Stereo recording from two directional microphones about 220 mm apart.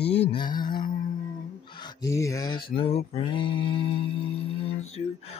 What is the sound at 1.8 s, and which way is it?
Speech, 15° left (ahead or behind).